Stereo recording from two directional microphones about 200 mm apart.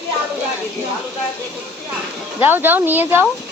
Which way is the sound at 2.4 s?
10° right (ahead or behind).